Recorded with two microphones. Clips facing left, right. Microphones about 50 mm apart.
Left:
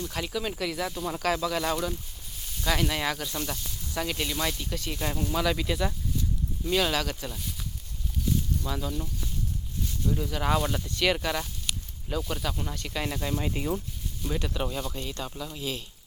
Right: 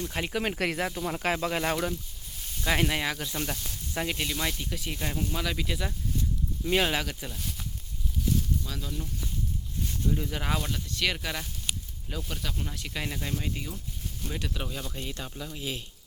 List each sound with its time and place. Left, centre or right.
0.0 s speech: right
0.3 s speech: right
0.9 s speech: right
2.8 s speech: centre
6.7 s speech: right
7.0 s speech: centre
8.6 s speech: centre
10.1 s speech: centre
10.8 s speech: centre
11.7 s snake: centre
12.0 s speech: centre
13.4 s speech: centre
14.3 s speech: centre
14.9 s speech: centre